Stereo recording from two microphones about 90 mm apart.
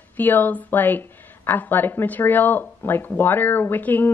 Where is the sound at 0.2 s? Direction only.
20° left (ahead or behind).